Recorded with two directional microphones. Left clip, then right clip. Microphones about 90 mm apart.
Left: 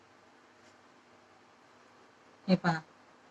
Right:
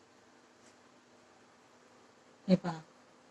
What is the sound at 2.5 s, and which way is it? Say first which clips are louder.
Speech: left 3 dB; 30° left (ahead or behind).